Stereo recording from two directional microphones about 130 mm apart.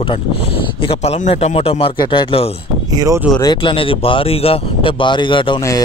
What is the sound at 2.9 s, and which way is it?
Speech, 25° right (ahead or behind).